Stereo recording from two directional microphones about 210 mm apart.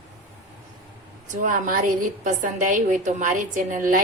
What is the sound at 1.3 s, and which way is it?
A woman's voice, 40° right (ahead or behind).